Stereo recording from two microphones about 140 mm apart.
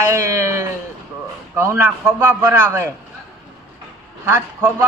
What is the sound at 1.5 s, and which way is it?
A man's voice, 20° right (ahead or behind).